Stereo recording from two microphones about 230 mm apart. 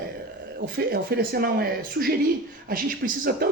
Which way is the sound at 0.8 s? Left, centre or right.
Right.